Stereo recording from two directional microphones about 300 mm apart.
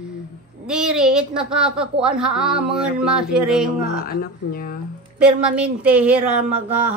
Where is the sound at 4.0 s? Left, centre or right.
Left.